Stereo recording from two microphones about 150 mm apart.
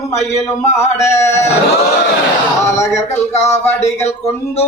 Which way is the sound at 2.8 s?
20° left (ahead or behind).